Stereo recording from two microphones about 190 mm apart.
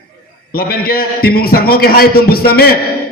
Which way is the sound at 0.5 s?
50° left (ahead or behind).